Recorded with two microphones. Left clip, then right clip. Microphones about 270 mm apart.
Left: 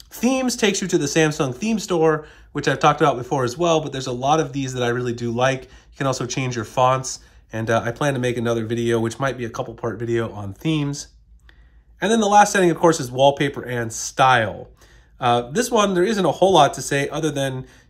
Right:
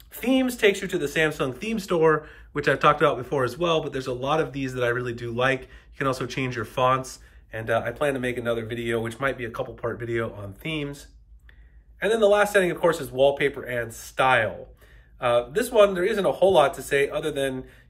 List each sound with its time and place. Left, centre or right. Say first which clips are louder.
0.1 s speech: left 3 dB; centre
12.0 s speech: left 5 dB; centre